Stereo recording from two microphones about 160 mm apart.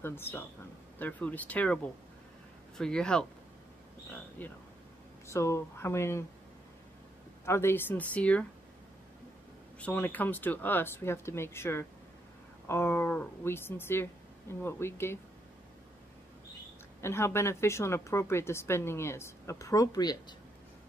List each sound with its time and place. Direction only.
0.0 s a woman's voice: 15° left (ahead or behind)
2.8 s speech: 5° left (ahead or behind)
4.4 s a woman's voice: 10° left (ahead or behind)
7.4 s a woman's voice: 15° left (ahead or behind)
9.8 s a woman's voice: 10° left (ahead or behind)
17.0 s a woman's voice: 15° left (ahead or behind)